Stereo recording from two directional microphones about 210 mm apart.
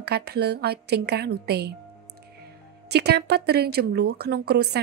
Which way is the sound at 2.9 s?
50° right (ahead or behind).